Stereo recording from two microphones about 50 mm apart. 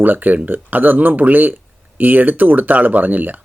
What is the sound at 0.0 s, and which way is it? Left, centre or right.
Speech, right.